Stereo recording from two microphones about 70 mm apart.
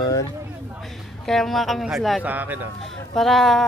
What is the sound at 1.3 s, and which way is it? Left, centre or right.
Speech, centre.